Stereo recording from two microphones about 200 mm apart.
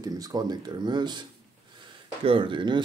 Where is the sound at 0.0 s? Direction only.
20° right (ahead or behind).